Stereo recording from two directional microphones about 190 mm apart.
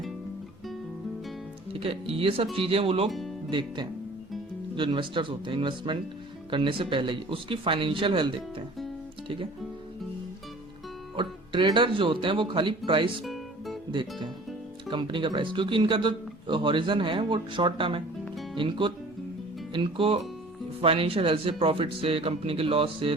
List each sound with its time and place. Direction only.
1.8 s speech: 30° right (ahead or behind)
11.2 s speech: 25° right (ahead or behind)
13.2 s music: centre (ahead or behind)
14.8 s speech: 25° right (ahead or behind)